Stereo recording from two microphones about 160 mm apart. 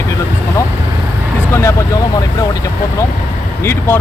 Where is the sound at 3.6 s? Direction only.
15° left (ahead or behind).